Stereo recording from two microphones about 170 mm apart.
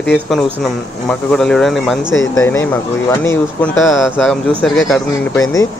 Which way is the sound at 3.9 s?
Centre (ahead or behind).